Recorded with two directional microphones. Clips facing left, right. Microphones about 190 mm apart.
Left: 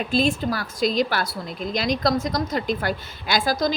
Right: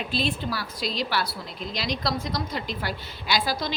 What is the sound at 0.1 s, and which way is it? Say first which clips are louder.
A woman's voice: left 7 dB; 45° left (ahead or behind).